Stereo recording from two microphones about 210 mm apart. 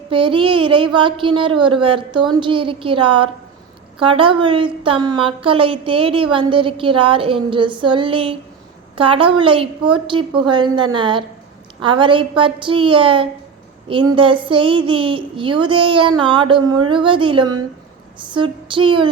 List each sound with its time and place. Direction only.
0.1 s a woman's voice: 25° right (ahead or behind)